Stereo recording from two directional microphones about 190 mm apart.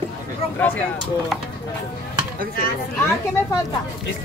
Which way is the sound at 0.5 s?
10° left (ahead or behind).